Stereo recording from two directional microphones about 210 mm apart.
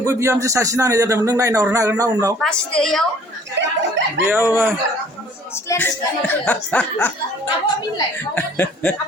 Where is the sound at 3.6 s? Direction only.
60° right (ahead or behind).